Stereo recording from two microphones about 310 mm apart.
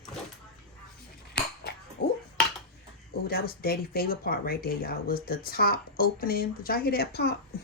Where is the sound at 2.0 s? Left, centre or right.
Left.